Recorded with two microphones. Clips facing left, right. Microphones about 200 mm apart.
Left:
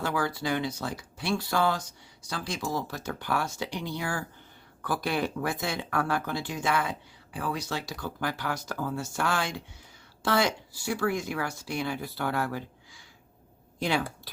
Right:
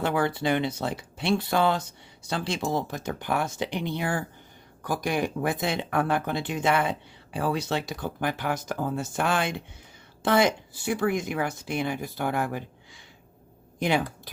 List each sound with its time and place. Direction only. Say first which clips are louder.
0.0 s speech: right 4 dB; 25° right (ahead or behind)
13.7 s speech: right 3 dB; 20° right (ahead or behind)